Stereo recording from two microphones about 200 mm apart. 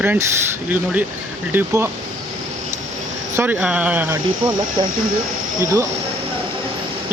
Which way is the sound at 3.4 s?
10° right (ahead or behind).